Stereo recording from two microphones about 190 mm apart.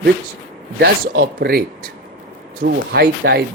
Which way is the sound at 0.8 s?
55° right (ahead or behind).